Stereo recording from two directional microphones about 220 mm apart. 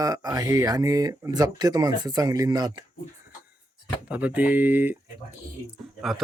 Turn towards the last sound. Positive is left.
turn(degrees=0)  # may be behind; listen again after turning